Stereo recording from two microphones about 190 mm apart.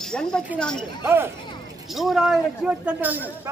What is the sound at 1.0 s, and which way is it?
Speech, 10° right (ahead or behind).